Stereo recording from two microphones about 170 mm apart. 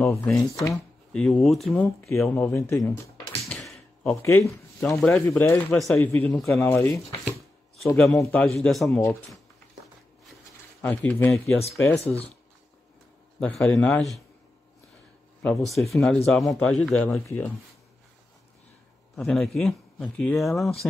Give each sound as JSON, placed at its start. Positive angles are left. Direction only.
{"t": 0.1, "sound": "speech", "side_deg": 15}
{"t": 2.2, "sound": "speech", "side_deg": 10}
{"t": 3.4, "sound": "a sound", "side_deg": 5}
{"t": 5.0, "sound": "speech", "side_deg": 10}
{"t": 10.8, "sound": "speech", "side_deg": 10}
{"t": 12.0, "sound": "speech", "side_deg": 35}
{"t": 13.4, "sound": "a man's voice", "side_deg": 5}
{"t": 15.9, "sound": "speech", "side_deg": 0}
{"t": 19.1, "sound": "speech", "side_deg": 0}